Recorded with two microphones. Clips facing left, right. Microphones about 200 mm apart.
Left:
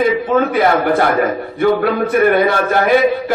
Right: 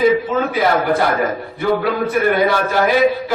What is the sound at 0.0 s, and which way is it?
A man's voice, 55° left (ahead or behind).